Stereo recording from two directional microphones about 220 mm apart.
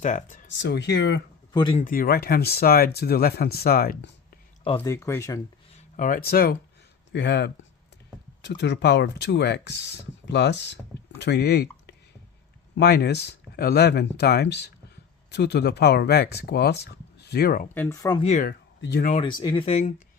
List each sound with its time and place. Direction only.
0.0 s speech: 35° left (ahead or behind)
0.6 s speech: 50° left (ahead or behind)
1.5 s speech: 20° left (ahead or behind)
1.8 s speech: 40° left (ahead or behind)
4.8 s speech: 10° left (ahead or behind)
5.7 s speech: 35° left (ahead or behind)
17.7 s speech: 15° left (ahead or behind)
18.2 s speech: 30° left (ahead or behind)
18.4 s speech: 45° left (ahead or behind)
19.1 s speech: 20° left (ahead or behind)